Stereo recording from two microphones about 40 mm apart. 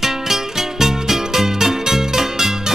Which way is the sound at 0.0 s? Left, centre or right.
Centre.